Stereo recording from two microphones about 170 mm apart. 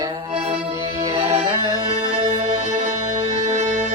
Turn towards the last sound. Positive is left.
turn(degrees=-45)  # may be behind; listen again after turning